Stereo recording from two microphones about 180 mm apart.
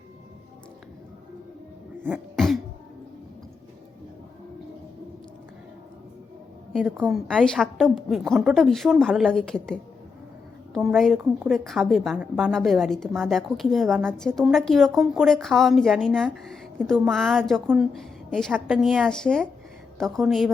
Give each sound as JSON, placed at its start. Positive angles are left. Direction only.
{"t": 2.3, "sound": "throat clearing", "side_deg": 0}
{"t": 7.1, "sound": "a woman's voice", "side_deg": 5}